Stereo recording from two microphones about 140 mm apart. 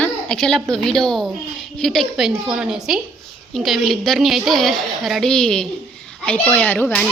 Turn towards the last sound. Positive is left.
turn(degrees=10)  # may be behind; listen again after turning